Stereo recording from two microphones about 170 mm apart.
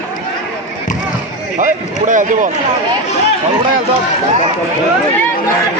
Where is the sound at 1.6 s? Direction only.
50° right (ahead or behind).